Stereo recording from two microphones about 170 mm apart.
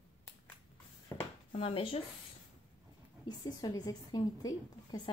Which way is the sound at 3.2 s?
25° left (ahead or behind).